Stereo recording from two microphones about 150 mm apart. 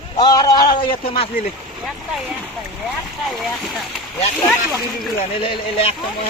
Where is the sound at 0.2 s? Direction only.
25° left (ahead or behind).